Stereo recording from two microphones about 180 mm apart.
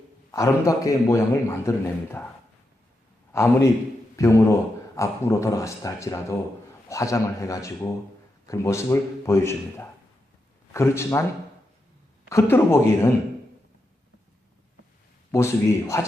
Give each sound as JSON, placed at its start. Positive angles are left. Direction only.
{"t": 0.3, "sound": "a man's voice", "side_deg": 15}
{"t": 3.3, "sound": "a man's voice", "side_deg": 15}
{"t": 12.3, "sound": "a man's voice", "side_deg": 15}
{"t": 15.3, "sound": "a man's voice", "side_deg": 15}